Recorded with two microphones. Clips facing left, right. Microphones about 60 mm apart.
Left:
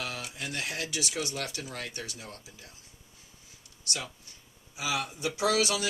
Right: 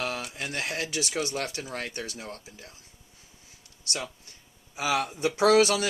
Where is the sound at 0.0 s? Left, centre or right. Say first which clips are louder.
Right 5 dB; right.